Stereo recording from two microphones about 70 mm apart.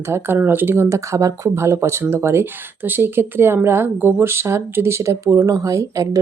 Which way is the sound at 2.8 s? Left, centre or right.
Right.